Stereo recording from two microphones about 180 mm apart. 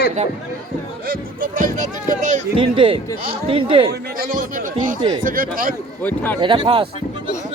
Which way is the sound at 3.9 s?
50° right (ahead or behind).